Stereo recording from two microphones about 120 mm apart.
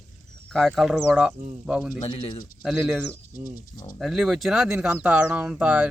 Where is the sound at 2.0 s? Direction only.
45° left (ahead or behind).